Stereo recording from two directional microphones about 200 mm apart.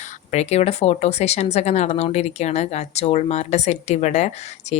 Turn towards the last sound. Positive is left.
turn(degrees=35)  # may be behind; listen again after turning